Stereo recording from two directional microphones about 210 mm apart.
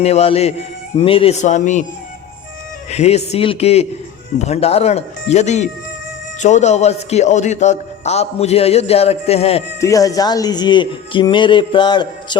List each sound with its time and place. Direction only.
0.0 s a man's voice: 30° left (ahead or behind)
2.9 s a man's voice: 30° left (ahead or behind)
9.8 s speech: 15° left (ahead or behind)